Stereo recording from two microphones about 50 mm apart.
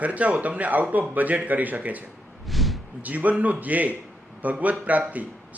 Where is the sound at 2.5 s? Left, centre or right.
Centre.